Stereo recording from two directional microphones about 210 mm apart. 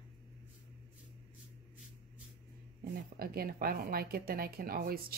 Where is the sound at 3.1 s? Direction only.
45° right (ahead or behind).